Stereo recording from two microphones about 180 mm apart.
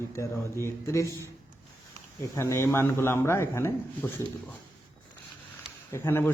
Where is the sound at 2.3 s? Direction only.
15° left (ahead or behind).